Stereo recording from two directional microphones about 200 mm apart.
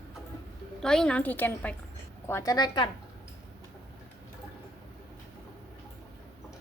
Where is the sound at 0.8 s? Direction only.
5° left (ahead or behind); by 2.9 s 20° left (ahead or behind).